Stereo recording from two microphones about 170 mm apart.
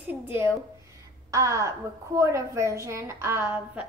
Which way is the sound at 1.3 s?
20° right (ahead or behind).